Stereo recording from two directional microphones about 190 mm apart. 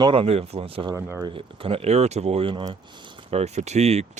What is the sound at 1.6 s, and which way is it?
Speech, 30° right (ahead or behind).